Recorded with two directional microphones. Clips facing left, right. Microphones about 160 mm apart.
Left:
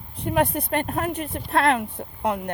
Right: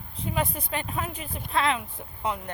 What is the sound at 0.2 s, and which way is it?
Speech, 65° left (ahead or behind).